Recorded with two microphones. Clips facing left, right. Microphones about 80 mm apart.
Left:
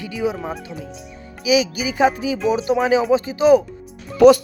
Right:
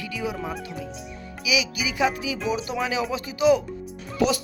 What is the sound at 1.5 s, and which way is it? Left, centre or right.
Speech, left.